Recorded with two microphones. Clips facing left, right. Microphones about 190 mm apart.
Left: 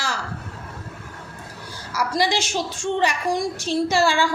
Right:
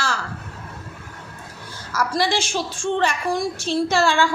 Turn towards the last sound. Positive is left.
turn(degrees=15)  # may be behind; listen again after turning